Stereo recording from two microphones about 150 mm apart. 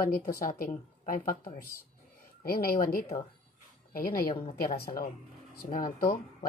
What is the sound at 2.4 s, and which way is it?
A woman's voice, 85° left.